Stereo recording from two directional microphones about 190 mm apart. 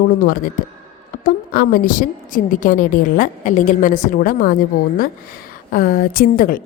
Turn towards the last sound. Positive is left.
turn(degrees=50)  # may be behind; listen again after turning